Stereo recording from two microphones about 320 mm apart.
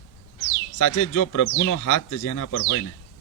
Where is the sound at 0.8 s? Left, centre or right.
Left.